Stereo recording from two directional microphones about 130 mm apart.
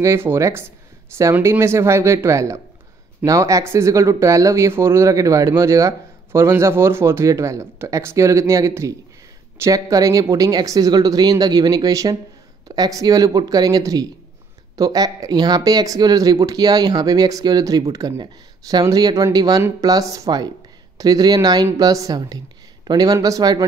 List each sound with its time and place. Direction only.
0.0 s speech: 20° right (ahead or behind)